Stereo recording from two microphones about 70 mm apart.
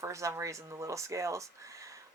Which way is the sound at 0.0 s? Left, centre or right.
Right.